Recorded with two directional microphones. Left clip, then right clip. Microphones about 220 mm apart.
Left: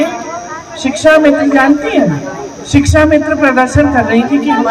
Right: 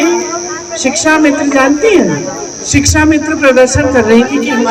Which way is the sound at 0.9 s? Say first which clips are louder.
Left 2 dB; 45° right (ahead or behind).